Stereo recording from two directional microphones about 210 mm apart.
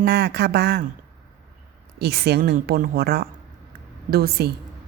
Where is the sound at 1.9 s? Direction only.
50° right (ahead or behind).